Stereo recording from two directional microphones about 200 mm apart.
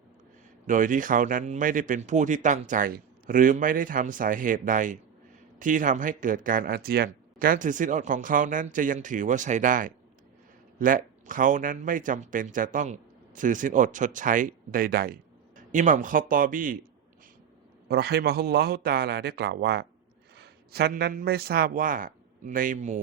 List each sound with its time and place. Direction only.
0.7 s speech: 40° right (ahead or behind)
17.8 s a man's voice: 50° right (ahead or behind)